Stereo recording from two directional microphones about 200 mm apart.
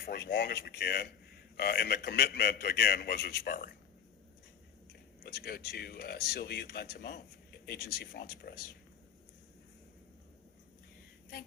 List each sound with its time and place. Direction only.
0.0 s speech: 50° left (ahead or behind)
4.9 s speech: 50° left (ahead or behind)